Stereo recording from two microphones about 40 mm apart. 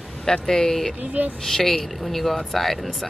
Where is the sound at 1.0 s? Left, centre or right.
Right.